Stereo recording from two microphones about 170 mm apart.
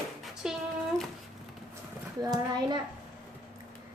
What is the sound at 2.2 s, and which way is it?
Speech, 25° right (ahead or behind).